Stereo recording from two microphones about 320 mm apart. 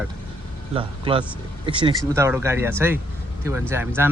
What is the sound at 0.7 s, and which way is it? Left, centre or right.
Speech, centre.